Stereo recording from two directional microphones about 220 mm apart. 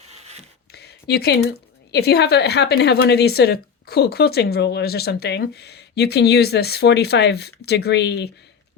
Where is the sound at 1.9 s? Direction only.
50° left (ahead or behind).